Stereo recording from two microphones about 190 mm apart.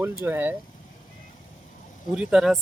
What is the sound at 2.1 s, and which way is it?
Speech, centre (ahead or behind).